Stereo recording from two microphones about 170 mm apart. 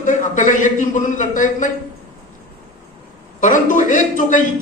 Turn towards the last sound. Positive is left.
turn(degrees=50)  # may be behind; listen again after turning